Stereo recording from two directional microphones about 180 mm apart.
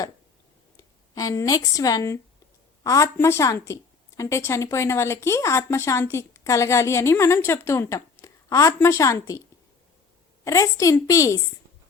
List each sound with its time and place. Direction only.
1.1 s a woman's voice: 20° left (ahead or behind)
10.4 s speech: 20° left (ahead or behind)